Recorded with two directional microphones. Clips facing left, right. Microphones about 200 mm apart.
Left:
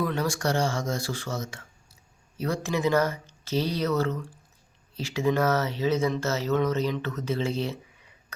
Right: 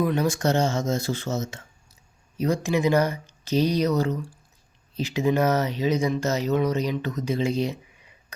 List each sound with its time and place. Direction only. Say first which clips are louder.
0.0 s speech: right 4 dB; 20° right (ahead or behind)